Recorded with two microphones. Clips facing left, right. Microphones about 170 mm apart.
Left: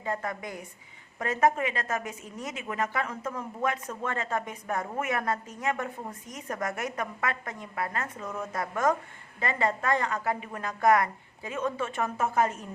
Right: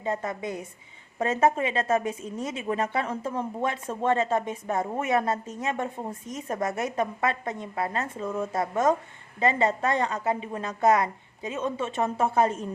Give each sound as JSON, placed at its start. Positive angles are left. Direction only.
{"t": 0.0, "sound": "a woman's voice", "side_deg": -25}